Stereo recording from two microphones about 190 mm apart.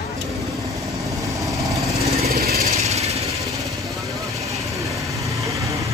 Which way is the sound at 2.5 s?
35° right (ahead or behind).